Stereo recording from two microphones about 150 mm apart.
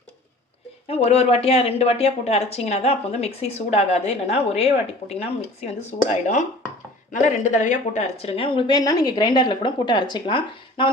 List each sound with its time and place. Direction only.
0.9 s speech: 40° left (ahead or behind)